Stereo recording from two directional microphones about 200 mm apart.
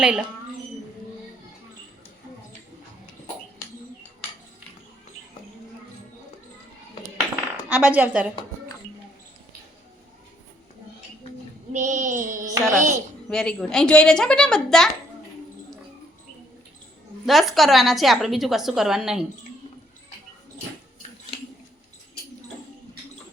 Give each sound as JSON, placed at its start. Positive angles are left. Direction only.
{"t": 0.0, "sound": "a woman's voice", "side_deg": -5}
{"t": 7.5, "sound": "speech", "side_deg": -5}
{"t": 11.7, "sound": "child singing", "side_deg": -35}
{"t": 12.5, "sound": "child singing", "side_deg": -15}
{"t": 13.3, "sound": "a woman's voice", "side_deg": 5}
{"t": 17.2, "sound": "a woman's voice", "side_deg": 0}